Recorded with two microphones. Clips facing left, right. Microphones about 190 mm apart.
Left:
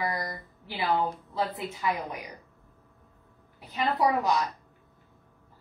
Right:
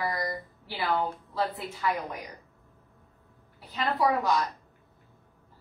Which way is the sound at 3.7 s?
20° left (ahead or behind).